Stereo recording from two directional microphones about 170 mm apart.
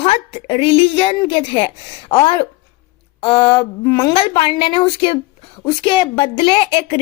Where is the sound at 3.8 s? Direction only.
15° left (ahead or behind).